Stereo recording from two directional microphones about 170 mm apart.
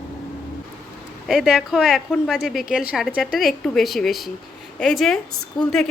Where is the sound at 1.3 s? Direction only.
5° right (ahead or behind).